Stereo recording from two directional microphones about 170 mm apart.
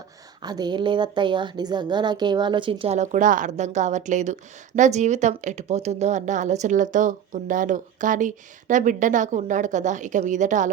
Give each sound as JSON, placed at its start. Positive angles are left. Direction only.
{"t": 0.4, "sound": "a woman's voice", "side_deg": -25}